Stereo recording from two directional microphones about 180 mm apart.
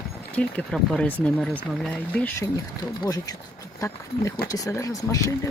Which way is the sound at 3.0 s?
20° left (ahead or behind).